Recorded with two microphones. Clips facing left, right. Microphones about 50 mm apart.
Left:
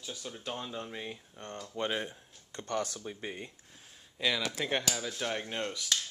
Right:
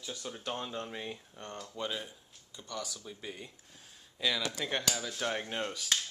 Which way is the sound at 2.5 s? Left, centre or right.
Left.